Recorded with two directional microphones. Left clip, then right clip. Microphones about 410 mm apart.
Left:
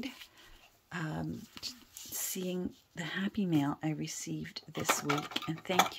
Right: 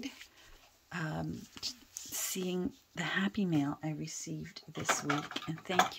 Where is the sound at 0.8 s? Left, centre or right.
Centre.